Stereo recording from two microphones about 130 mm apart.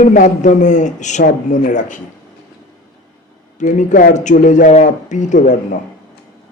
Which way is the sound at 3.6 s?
70° left (ahead or behind).